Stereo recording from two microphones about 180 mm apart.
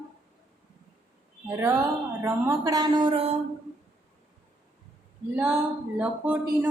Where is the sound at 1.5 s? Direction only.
15° right (ahead or behind).